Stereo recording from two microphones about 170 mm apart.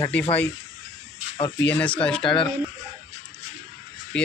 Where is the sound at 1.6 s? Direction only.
10° left (ahead or behind).